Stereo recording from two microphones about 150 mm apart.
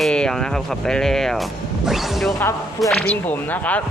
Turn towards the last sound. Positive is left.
turn(degrees=10)  # may be behind; listen again after turning